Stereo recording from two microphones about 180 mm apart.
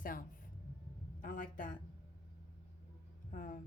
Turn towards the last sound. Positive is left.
turn(degrees=50)  # may be behind; listen again after turning